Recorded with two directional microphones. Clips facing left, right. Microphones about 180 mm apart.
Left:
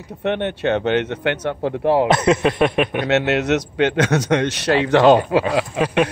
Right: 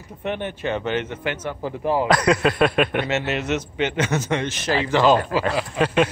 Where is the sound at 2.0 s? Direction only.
25° left (ahead or behind).